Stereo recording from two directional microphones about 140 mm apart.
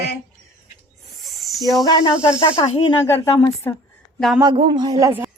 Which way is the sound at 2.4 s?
45° left (ahead or behind).